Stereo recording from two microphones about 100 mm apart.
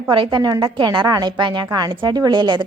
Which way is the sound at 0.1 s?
50° right (ahead or behind).